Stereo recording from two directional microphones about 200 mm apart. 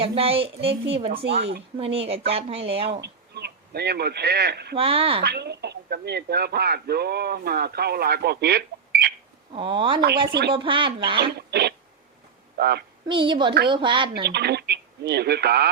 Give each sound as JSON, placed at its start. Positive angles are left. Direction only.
{"t": 0.0, "sound": "a woman's voice", "side_deg": -30}
{"t": 1.1, "sound": "speech", "side_deg": -55}
{"t": 1.8, "sound": "a woman's voice", "side_deg": -30}
{"t": 3.0, "sound": "speech", "side_deg": -55}
{"t": 4.8, "sound": "a woman's voice", "side_deg": -30}
{"t": 5.2, "sound": "speech", "side_deg": -55}
{"t": 9.5, "sound": "a woman's voice", "side_deg": -25}
{"t": 11.3, "sound": "throat clearing", "side_deg": -55}
{"t": 12.5, "sound": "a woman's voice", "side_deg": -55}
{"t": 13.1, "sound": "a woman's voice", "side_deg": -25}
{"t": 14.3, "sound": "speech", "side_deg": -55}